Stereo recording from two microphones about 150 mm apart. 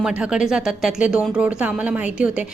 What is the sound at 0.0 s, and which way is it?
A woman's voice, 5° right (ahead or behind).